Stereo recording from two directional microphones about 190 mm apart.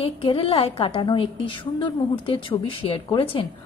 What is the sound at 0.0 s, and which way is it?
A woman's voice, 30° left (ahead or behind).